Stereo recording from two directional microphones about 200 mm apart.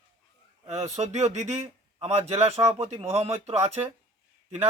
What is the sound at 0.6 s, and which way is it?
A man's voice, 35° right (ahead or behind).